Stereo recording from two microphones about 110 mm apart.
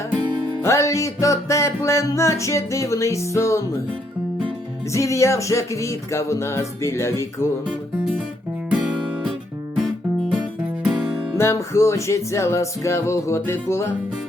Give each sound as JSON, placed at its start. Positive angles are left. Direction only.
{"t": 0.6, "sound": "music", "side_deg": 25}
{"t": 4.9, "sound": "music", "side_deg": 25}
{"t": 10.8, "sound": "music", "side_deg": -10}
{"t": 11.3, "sound": "music", "side_deg": 25}